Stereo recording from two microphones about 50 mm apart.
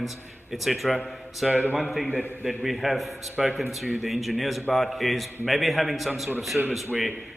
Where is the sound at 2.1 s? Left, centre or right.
Left.